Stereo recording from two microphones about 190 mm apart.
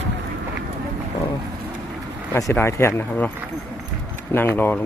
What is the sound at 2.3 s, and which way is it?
Speech, 15° left (ahead or behind).